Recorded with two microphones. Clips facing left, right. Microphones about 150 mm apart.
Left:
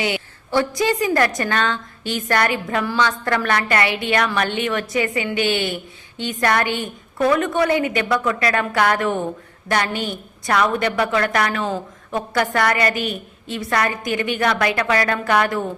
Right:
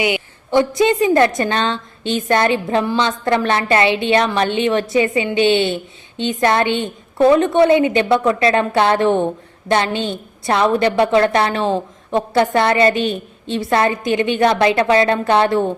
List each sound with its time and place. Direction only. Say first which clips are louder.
0.0 s a woman's voice: right 4 dB; 15° right (ahead or behind)